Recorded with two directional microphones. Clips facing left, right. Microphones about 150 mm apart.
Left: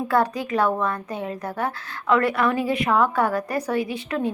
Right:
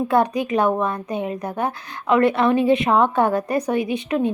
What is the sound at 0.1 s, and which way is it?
A woman's voice, 20° right (ahead or behind).